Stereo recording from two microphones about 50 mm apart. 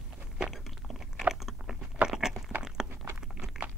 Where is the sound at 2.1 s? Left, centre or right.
Centre.